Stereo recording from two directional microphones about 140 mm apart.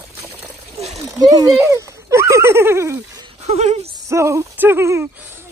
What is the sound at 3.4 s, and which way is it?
Speech, 50° right (ahead or behind).